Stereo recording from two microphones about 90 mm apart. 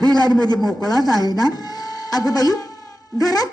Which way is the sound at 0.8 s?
45° left (ahead or behind).